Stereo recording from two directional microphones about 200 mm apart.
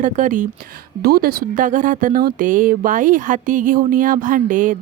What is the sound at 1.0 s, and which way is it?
Speech, 50° right (ahead or behind).